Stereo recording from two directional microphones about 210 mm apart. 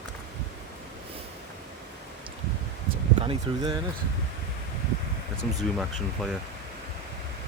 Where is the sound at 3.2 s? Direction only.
25° right (ahead or behind).